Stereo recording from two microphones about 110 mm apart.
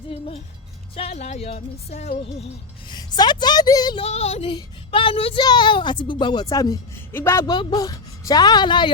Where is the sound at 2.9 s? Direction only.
40° left (ahead or behind).